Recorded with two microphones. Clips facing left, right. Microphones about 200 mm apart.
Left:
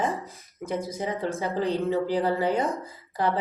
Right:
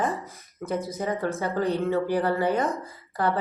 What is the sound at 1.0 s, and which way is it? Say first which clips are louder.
A woman's voice: right 2 dB; 20° left (ahead or behind).